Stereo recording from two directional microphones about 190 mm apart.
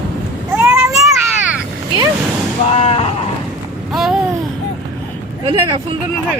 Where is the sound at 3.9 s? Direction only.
Centre (ahead or behind).